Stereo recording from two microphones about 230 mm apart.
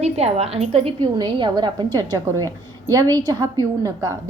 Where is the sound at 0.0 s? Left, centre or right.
Right.